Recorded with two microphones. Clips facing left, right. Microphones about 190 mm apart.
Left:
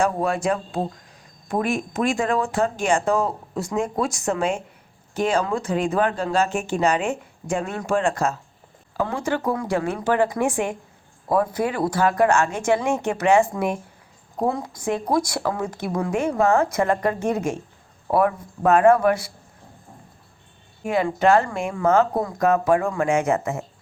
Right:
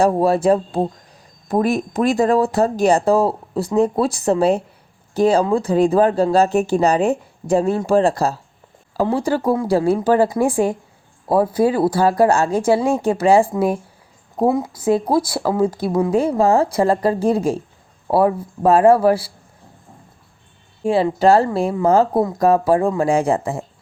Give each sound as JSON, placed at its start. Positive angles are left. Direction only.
{"t": 0.0, "sound": "speech", "side_deg": -35}
{"t": 20.8, "sound": "speech", "side_deg": -30}